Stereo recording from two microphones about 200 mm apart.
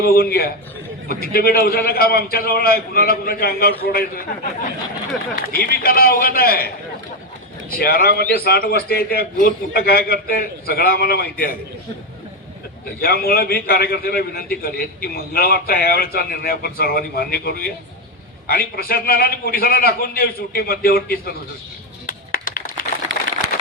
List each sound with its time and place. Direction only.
0.0 s a man's voice: 50° left (ahead or behind)
7.7 s a man's voice: 50° left (ahead or behind)
13.0 s a man's voice: 50° left (ahead or behind)
22.0 s a sound: 45° left (ahead or behind)